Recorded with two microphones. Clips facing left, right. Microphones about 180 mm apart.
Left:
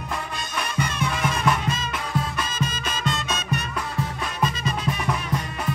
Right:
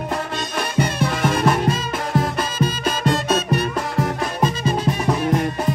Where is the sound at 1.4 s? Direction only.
55° right (ahead or behind).